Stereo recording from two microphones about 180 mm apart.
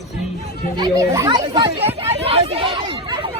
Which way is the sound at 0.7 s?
20° right (ahead or behind).